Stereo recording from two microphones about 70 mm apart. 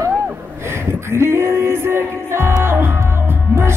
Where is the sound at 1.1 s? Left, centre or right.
Right.